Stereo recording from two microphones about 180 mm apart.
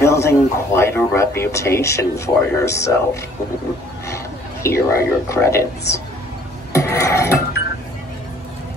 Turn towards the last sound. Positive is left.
turn(degrees=15)  # may be behind; listen again after turning